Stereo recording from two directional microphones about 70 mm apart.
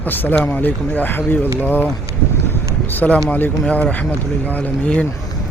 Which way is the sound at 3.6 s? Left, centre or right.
Centre.